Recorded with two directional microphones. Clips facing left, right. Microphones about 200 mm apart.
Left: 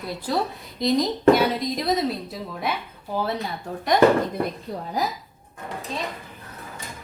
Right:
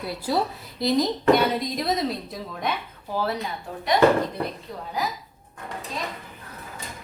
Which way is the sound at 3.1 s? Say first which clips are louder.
Even; 20° left (ahead or behind).